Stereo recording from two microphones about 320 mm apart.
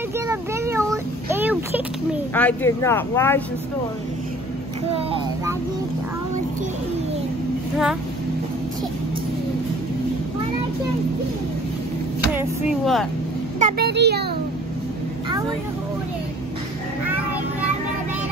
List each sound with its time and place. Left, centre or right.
0.3 s a sound: centre
2.3 s speech: centre
4.9 s a child's voice: centre
12.4 s speech: centre
13.6 s a child's voice: right